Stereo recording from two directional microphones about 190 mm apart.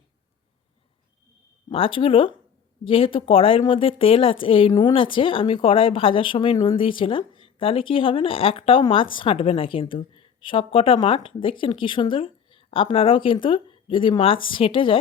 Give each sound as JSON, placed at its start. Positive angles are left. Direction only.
{"t": 1.7, "sound": "speech", "side_deg": 30}